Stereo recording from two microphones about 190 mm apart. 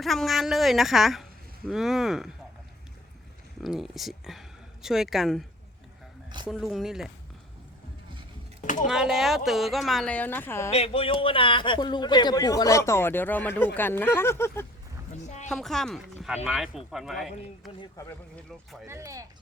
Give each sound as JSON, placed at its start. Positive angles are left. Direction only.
{"t": 0.0, "sound": "speech", "side_deg": 0}
{"t": 3.6, "sound": "speech", "side_deg": 0}
{"t": 6.5, "sound": "speech", "side_deg": 0}
{"t": 8.6, "sound": "speech", "side_deg": 40}
{"t": 8.9, "sound": "speech", "side_deg": 0}
{"t": 10.7, "sound": "a man's voice", "side_deg": 30}
{"t": 15.1, "sound": "a sound", "side_deg": 40}
{"t": 15.4, "sound": "speech", "side_deg": 0}
{"t": 18.9, "sound": "speech", "side_deg": -15}